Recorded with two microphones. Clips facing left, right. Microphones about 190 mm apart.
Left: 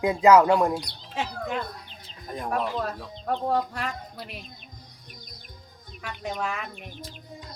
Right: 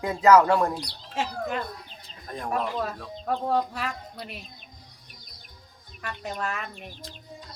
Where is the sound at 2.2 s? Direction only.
5° left (ahead or behind).